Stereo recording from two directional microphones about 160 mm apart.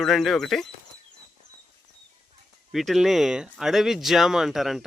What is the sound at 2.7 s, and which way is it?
Speech, centre (ahead or behind).